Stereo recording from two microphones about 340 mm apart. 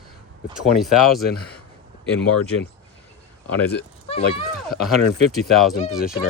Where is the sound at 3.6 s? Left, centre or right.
Centre.